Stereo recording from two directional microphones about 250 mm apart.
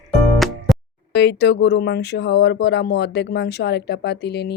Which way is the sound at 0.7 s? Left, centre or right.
Centre.